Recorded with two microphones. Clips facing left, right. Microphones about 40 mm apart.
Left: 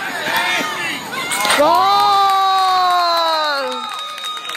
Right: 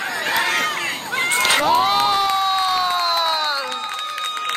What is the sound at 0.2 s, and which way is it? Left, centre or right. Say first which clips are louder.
Run: left 2 dB; left.